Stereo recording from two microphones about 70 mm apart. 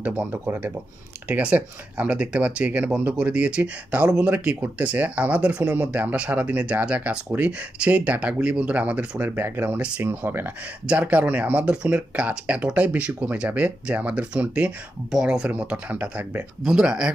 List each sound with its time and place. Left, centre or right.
0.0 s speech: right
1.3 s speech: centre
10.9 s speech: centre
16.6 s speech: centre